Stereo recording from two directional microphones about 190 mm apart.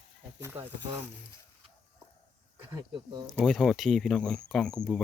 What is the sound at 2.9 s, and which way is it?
Speech, 25° right (ahead or behind).